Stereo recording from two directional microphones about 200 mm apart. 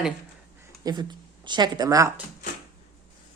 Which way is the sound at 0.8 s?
20° right (ahead or behind).